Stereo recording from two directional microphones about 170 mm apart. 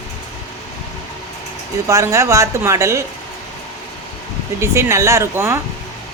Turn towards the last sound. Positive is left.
turn(degrees=-15)  # may be behind; listen again after turning